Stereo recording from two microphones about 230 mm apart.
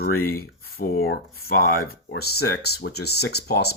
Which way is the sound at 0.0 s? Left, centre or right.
Left.